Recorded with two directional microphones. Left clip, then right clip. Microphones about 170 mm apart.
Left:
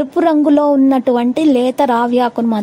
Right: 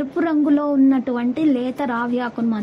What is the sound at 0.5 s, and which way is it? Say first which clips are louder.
Speech: left 6 dB; 50° left (ahead or behind).